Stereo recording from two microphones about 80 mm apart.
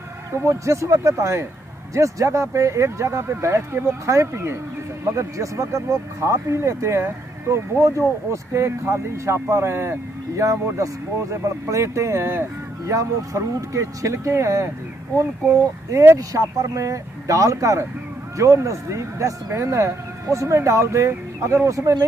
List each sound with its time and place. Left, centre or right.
0.3 s speech: right
12.8 s speech: right